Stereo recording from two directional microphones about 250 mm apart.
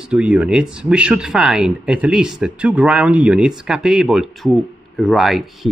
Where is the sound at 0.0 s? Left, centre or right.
Centre.